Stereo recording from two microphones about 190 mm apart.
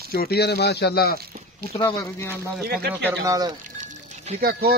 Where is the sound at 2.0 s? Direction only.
10° left (ahead or behind).